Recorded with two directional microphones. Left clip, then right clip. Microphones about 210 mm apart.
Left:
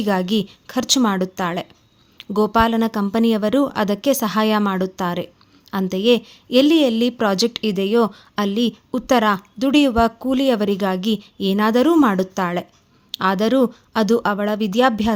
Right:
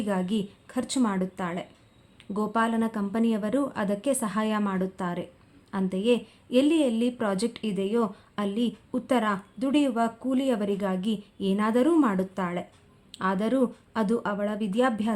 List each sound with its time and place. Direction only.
0.0 s a woman's voice: 40° left (ahead or behind)